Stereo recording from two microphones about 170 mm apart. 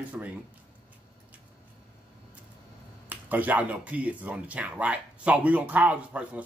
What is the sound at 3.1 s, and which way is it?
Speech, 10° right (ahead or behind).